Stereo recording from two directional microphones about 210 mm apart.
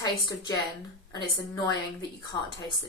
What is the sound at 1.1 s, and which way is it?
Speech, 20° left (ahead or behind).